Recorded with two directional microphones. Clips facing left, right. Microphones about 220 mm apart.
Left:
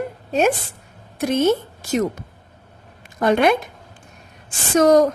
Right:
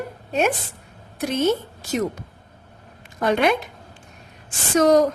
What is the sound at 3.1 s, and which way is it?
Speech, 50° left (ahead or behind).